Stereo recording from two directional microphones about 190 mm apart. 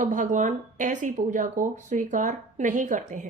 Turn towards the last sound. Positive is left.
turn(degrees=-40)  # may be behind; listen again after turning